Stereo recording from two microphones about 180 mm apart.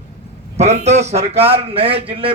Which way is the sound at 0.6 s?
40° right (ahead or behind).